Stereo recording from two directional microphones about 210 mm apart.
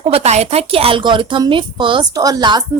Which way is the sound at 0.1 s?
30° right (ahead or behind).